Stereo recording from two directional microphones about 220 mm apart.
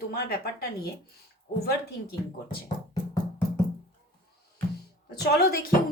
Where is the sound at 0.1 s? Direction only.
45° left (ahead or behind).